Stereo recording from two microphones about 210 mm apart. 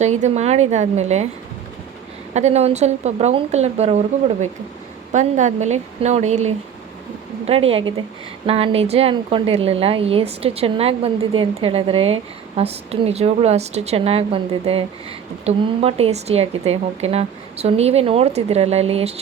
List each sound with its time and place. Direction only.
0.0 s speech: 35° right (ahead or behind)
2.3 s speech: 30° right (ahead or behind)